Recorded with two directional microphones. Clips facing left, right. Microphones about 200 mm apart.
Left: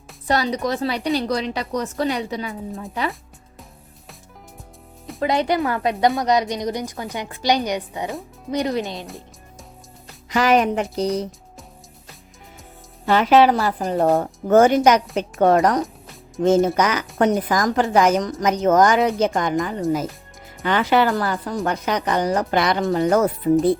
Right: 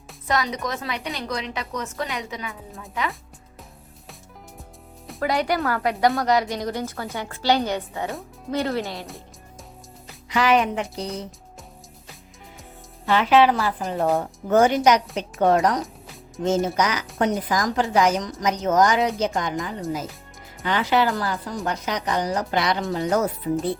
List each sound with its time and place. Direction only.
0.3 s a woman's voice: 35° left (ahead or behind)
5.2 s a woman's voice: 20° left (ahead or behind)
10.2 s speech: 45° left (ahead or behind)
13.1 s a woman's voice: 45° left (ahead or behind)